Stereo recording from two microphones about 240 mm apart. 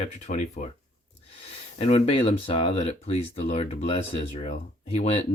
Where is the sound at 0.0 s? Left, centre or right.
Left.